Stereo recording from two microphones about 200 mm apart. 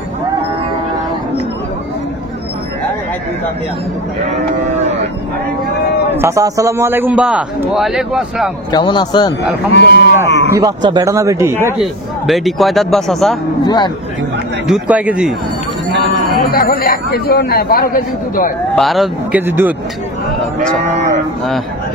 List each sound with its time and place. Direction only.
4.6 s cattle: 35° right (ahead or behind)
6.1 s a man's voice: 15° right (ahead or behind)
8.7 s a man's voice: 20° left (ahead or behind)
9.8 s a man's voice: 60° left (ahead or behind)
10.5 s a man's voice: 20° right (ahead or behind)
11.8 s a man's voice: centre (ahead or behind)
13.7 s a man's voice: 20° left (ahead or behind)
14.7 s a man's voice: 5° right (ahead or behind)
16.4 s speech: 50° left (ahead or behind)
18.8 s a man's voice: centre (ahead or behind)
19.4 s a man's voice: 10° right (ahead or behind)
20.8 s speech: 35° right (ahead or behind)